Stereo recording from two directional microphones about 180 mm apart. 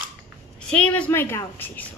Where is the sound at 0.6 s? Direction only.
5° left (ahead or behind).